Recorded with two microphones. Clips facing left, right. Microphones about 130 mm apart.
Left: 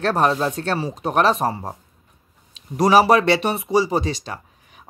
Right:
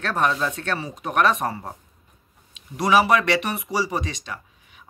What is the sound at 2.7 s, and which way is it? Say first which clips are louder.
Speech: left 4 dB; 40° left (ahead or behind).